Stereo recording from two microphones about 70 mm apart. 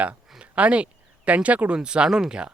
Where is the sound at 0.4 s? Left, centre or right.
Centre.